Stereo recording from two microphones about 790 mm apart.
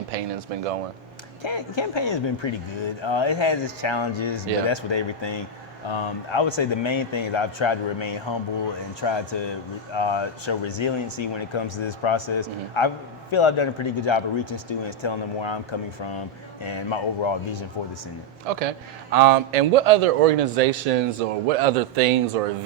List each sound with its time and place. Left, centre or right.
0.1 s speech: right
1.4 s speech: left
16.6 s speech: left
19.1 s speech: right